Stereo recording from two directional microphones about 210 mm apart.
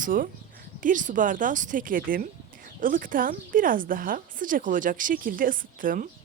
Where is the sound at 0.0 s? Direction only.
40° right (ahead or behind).